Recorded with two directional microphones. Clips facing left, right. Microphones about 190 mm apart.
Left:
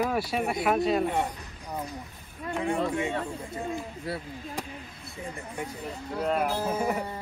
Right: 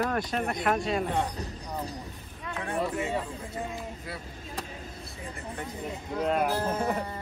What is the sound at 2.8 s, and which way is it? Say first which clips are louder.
Speech: left 1 dB; 5° right (ahead or behind).